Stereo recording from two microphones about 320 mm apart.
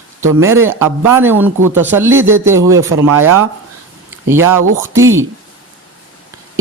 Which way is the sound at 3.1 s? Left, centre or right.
Right.